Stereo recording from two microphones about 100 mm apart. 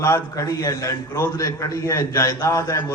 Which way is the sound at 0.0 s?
30° left (ahead or behind).